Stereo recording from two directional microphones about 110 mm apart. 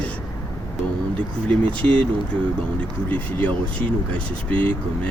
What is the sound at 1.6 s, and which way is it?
Speech, 10° left (ahead or behind).